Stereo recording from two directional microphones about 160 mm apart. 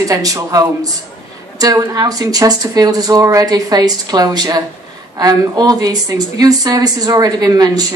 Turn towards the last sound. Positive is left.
turn(degrees=-25)  # may be behind; listen again after turning